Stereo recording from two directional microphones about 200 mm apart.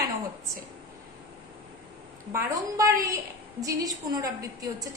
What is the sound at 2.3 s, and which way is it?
A woman's voice, 15° right (ahead or behind).